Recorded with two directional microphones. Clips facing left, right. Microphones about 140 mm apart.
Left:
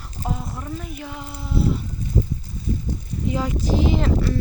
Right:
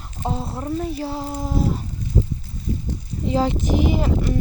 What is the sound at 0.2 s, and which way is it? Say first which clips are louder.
Speech: right 3 dB; 30° right (ahead or behind).